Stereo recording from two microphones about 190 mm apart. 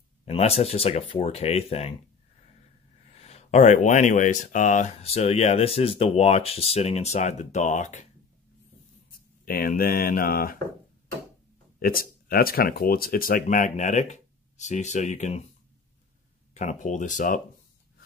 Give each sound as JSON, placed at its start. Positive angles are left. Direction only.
{"t": 0.2, "sound": "speech", "side_deg": 30}
{"t": 3.2, "sound": "speech", "side_deg": 35}
{"t": 9.4, "sound": "speech", "side_deg": 50}
{"t": 11.8, "sound": "speech", "side_deg": 50}
{"t": 16.5, "sound": "speech", "side_deg": 40}